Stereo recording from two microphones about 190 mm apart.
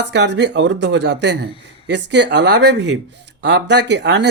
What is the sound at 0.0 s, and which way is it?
Speech, 65° right (ahead or behind).